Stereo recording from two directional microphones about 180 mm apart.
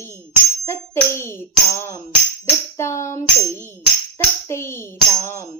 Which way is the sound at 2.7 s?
15° left (ahead or behind).